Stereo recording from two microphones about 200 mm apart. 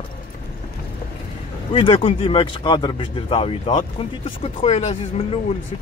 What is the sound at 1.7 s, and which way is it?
Speech, 25° left (ahead or behind).